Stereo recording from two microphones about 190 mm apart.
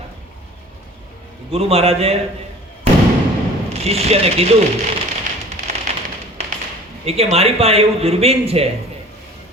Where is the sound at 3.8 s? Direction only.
35° right (ahead or behind).